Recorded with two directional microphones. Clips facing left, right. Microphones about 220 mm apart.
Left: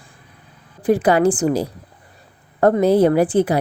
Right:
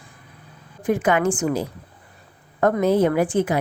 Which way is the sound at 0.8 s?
35° left (ahead or behind).